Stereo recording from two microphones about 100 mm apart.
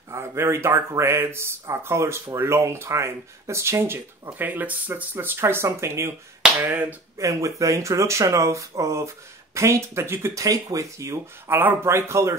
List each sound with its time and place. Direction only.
0.1 s speech: 25° right (ahead or behind)
7.2 s speech: 35° right (ahead or behind)